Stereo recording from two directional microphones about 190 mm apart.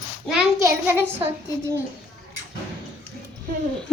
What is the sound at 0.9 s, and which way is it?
Speech, 10° right (ahead or behind).